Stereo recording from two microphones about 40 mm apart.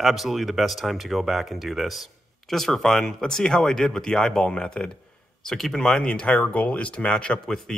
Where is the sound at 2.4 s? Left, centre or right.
Centre.